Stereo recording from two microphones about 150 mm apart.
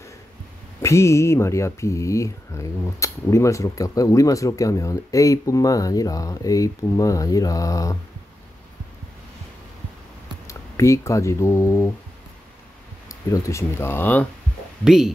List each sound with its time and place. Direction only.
0.8 s speech: 20° left (ahead or behind)
10.4 s speech: 20° left (ahead or behind)
13.1 s speech: 20° left (ahead or behind)
14.9 s speech: 5° right (ahead or behind)